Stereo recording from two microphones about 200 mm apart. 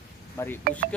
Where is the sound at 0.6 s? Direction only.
45° right (ahead or behind).